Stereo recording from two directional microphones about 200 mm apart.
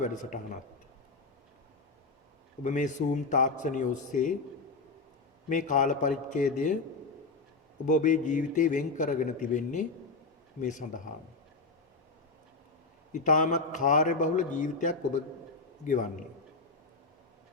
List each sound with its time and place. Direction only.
0.0 s a man's voice: 40° left (ahead or behind)
2.6 s a man's voice: 40° left (ahead or behind)
5.5 s a man's voice: 40° left (ahead or behind)
7.9 s a man's voice: 40° left (ahead or behind)
13.1 s a man's voice: 40° left (ahead or behind)